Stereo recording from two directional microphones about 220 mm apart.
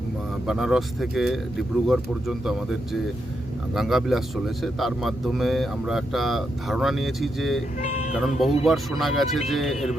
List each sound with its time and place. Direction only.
0.4 s a man's voice: centre (ahead or behind)
7.8 s speech: 35° left (ahead or behind)
8.2 s a man's voice: centre (ahead or behind)